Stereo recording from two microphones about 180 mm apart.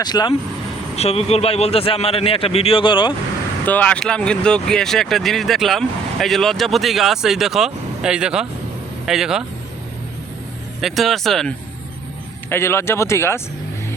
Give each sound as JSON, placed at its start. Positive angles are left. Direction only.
{"t": 0.0, "sound": "speech", "side_deg": 25}
{"t": 0.9, "sound": "a man's voice", "side_deg": 35}
{"t": 3.7, "sound": "speech", "side_deg": 5}
{"t": 10.8, "sound": "speech", "side_deg": 0}
{"t": 12.5, "sound": "speech", "side_deg": 15}